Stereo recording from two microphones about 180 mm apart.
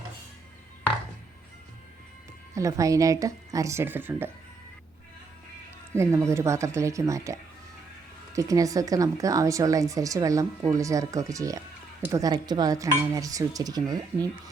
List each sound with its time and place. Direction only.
2.6 s speech: 20° right (ahead or behind)
5.9 s speech: 15° right (ahead or behind)